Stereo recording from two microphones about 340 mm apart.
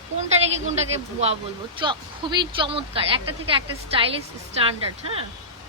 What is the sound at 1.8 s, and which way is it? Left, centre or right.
A woman's voice, centre.